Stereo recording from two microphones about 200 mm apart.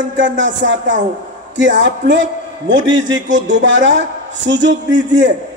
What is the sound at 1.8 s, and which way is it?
Speech, 65° right (ahead or behind).